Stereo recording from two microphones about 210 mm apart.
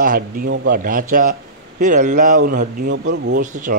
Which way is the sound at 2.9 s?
55° right (ahead or behind).